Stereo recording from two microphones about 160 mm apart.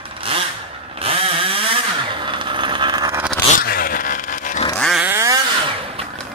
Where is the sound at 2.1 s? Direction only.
30° right (ahead or behind).